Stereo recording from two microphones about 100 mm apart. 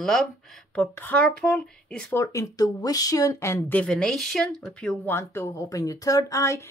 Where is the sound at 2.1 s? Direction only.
35° left (ahead or behind).